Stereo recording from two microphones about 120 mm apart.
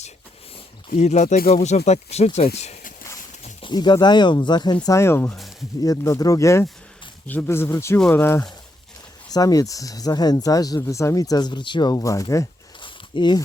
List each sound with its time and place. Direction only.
0.9 s speech: 70° left (ahead or behind)
3.6 s speech: 40° left (ahead or behind)
4.9 s speech: 20° left (ahead or behind)
9.3 s speech: 30° left (ahead or behind)
12.8 s a sound: 40° left (ahead or behind)